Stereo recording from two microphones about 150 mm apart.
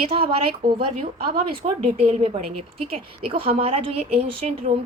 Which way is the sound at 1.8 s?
45° right (ahead or behind).